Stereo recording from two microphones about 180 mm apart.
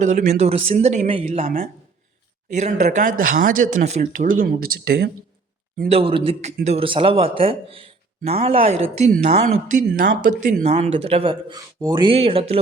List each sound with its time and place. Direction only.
0.0 s speech: 40° right (ahead or behind); by 5.1 s 60° right (ahead or behind)
5.9 s speech: 30° right (ahead or behind)